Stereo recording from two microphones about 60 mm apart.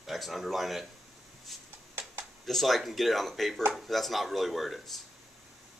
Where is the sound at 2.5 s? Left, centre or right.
Centre.